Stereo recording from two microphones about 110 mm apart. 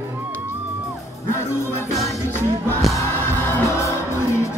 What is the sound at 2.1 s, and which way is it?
Music, 20° left (ahead or behind).